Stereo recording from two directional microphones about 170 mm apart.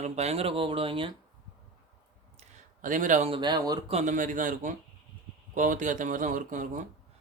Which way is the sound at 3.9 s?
45° right (ahead or behind).